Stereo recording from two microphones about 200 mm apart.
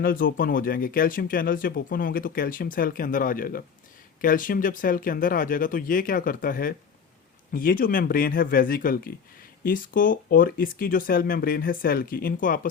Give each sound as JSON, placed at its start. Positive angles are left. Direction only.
{"t": 0.0, "sound": "speech", "side_deg": 45}